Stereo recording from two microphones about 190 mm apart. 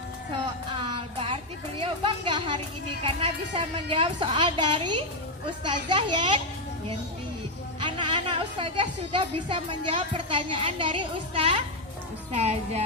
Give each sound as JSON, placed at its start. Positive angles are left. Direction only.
{"t": 0.7, "sound": "a sound", "side_deg": -25}
{"t": 1.8, "sound": "a woman's voice", "side_deg": -25}
{"t": 7.8, "sound": "a woman's voice", "side_deg": -25}